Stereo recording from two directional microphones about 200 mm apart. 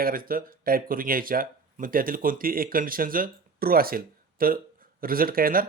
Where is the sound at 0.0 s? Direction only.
45° right (ahead or behind).